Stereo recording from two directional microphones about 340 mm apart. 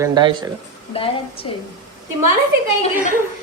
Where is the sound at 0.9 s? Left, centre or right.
Centre.